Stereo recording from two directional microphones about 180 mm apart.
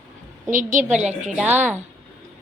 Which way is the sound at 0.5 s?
45° right (ahead or behind).